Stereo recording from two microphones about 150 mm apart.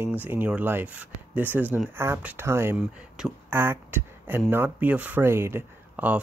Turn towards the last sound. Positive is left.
turn(degrees=-15)  # may be behind; listen again after turning